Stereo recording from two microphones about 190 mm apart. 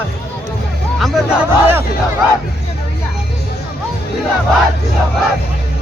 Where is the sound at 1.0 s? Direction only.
Centre (ahead or behind).